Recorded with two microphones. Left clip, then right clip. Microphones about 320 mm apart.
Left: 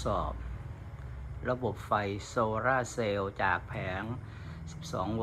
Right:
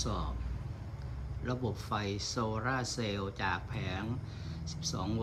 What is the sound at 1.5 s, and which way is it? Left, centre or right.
Speech, centre.